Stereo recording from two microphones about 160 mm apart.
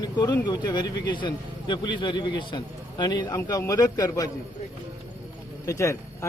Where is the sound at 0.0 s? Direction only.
25° left (ahead or behind).